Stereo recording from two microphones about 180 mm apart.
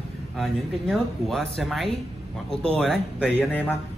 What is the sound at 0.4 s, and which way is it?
A man's voice, centre (ahead or behind).